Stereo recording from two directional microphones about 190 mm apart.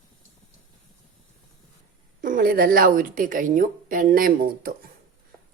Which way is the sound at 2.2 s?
45° right (ahead or behind).